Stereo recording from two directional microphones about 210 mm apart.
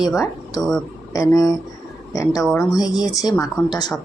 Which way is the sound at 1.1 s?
15° left (ahead or behind).